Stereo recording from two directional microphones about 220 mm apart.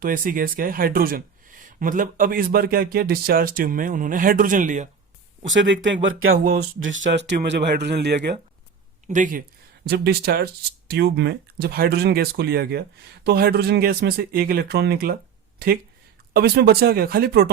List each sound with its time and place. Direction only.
0.0 s speech: 40° right (ahead or behind)
5.5 s speech: 55° right (ahead or behind); by 6.6 s 75° right (ahead or behind)
6.7 s speech: 60° right (ahead or behind)
9.0 s speech: 35° right (ahead or behind)
9.8 s speech: 45° right (ahead or behind)